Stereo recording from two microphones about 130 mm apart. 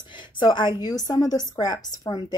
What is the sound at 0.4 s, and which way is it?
Speech, 35° left (ahead or behind).